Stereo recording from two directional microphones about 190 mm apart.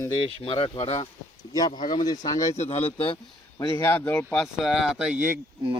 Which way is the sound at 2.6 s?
30° left (ahead or behind).